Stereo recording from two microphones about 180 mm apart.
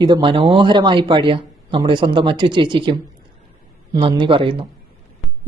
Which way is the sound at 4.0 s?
30° right (ahead or behind).